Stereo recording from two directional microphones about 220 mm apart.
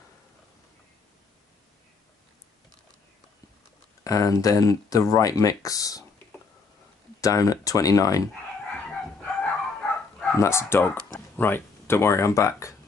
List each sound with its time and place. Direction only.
4.0 s speech: 15° left (ahead or behind)
7.2 s speech: 15° left (ahead or behind)
9.2 s bow-wow: 5° left (ahead or behind)
11.1 s speech: 10° left (ahead or behind)